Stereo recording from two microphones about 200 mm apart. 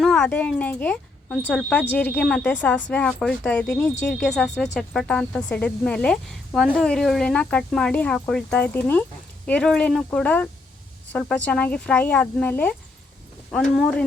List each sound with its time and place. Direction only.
0.0 s a woman's voice: 5° left (ahead or behind)